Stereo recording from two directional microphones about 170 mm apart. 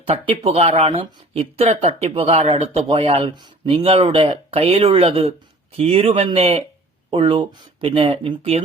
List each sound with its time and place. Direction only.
0.0 s speech: 35° right (ahead or behind)